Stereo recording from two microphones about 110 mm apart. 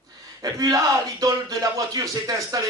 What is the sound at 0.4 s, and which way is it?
Speech, 35° right (ahead or behind).